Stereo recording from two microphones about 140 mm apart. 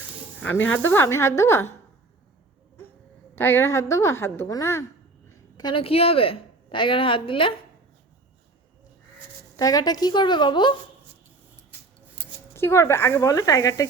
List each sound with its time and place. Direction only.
0.4 s a woman's voice: 15° left (ahead or behind)
3.3 s a woman's voice: 15° left (ahead or behind)
5.5 s a woman's voice: 35° left (ahead or behind)
9.6 s a woman's voice: 25° left (ahead or behind)
12.5 s a woman's voice: 20° left (ahead or behind)